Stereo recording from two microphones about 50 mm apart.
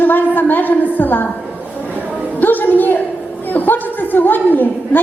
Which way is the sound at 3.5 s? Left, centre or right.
Left.